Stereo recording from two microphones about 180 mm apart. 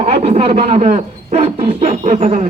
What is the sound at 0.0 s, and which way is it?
A man's voice, 35° right (ahead or behind).